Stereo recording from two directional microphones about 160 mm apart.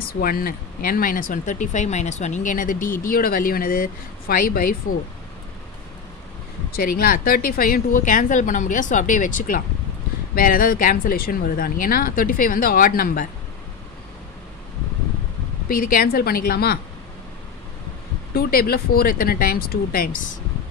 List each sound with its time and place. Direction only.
0.0 s speech: 65° left (ahead or behind)
6.7 s speech: 65° left (ahead or behind)
15.7 s a woman's voice: 65° left (ahead or behind)
18.3 s speech: 65° left (ahead or behind)